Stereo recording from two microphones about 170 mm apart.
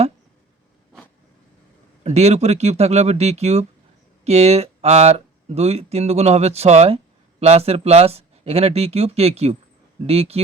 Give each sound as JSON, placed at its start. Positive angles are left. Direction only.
{"t": 2.0, "sound": "speech", "side_deg": -40}